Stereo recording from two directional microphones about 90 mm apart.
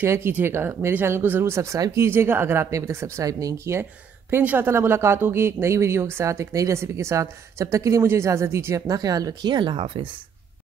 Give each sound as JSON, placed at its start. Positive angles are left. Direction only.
{"t": 0.0, "sound": "speech", "side_deg": -30}
{"t": 4.3, "sound": "speech", "side_deg": -20}